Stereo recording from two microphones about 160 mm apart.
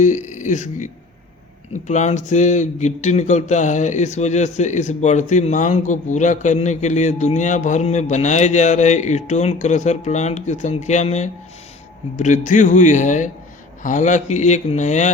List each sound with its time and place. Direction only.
0.0 s speech: 50° left (ahead or behind)
1.9 s speech: 45° left (ahead or behind)